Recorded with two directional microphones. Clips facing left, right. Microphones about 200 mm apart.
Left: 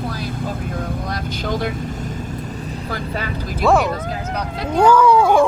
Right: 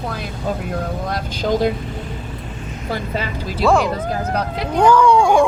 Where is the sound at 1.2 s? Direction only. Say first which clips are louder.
Right 2 dB; 50° left (ahead or behind).